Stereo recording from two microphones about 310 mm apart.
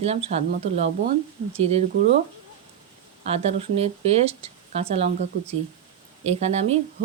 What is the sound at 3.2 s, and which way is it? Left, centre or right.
Speech, centre.